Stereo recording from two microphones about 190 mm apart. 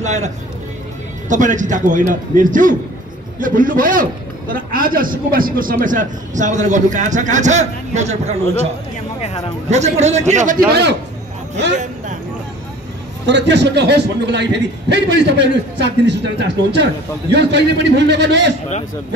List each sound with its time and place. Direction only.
0.0 s speech: 35° right (ahead or behind)
1.3 s a man's voice: 40° right (ahead or behind)
9.2 s a man's voice: 30° left (ahead or behind)
9.7 s a man's voice: 35° right (ahead or behind)
10.7 s a man's voice: 60° right (ahead or behind)
11.7 s vehicle: 40° right (ahead or behind)
13.3 s a man's voice: 65° right (ahead or behind)